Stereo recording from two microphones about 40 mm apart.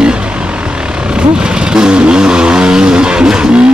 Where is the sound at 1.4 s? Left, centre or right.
Centre.